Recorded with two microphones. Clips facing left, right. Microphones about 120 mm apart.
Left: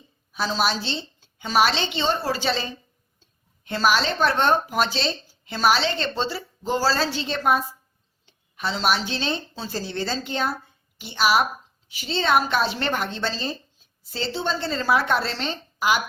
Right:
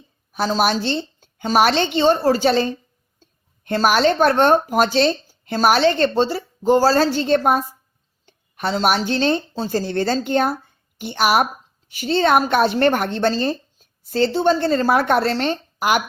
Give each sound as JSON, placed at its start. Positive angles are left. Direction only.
{"t": 0.3, "sound": "a woman's voice", "side_deg": -50}